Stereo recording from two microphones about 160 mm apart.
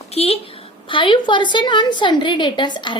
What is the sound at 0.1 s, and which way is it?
A woman's voice, 40° left (ahead or behind).